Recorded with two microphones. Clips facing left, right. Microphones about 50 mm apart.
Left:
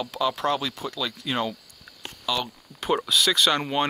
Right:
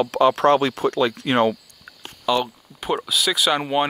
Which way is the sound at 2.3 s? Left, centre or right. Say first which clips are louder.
Right 7 dB; right.